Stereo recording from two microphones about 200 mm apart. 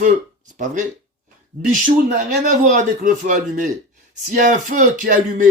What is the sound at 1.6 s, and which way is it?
A man's voice, 40° right (ahead or behind).